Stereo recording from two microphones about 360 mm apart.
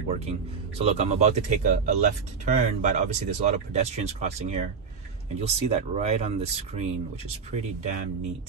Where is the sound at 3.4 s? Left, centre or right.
Centre.